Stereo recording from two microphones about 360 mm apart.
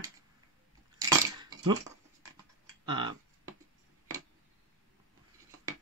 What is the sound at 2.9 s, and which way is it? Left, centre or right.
Speech, centre.